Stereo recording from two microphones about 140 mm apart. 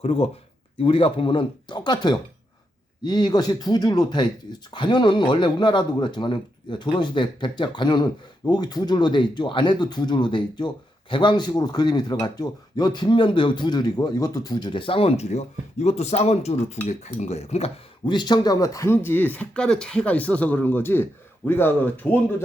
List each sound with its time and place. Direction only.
0.0 s speech: 45° left (ahead or behind)
18.0 s speech: 35° left (ahead or behind); by 22.4 s 15° left (ahead or behind)